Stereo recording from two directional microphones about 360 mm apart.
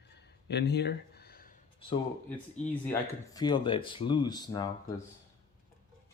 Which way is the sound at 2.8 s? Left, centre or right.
Centre.